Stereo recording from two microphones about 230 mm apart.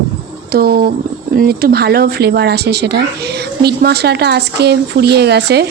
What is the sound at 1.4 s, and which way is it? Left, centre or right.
Speech, right.